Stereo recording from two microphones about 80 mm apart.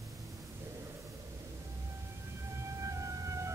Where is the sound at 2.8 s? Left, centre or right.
Right.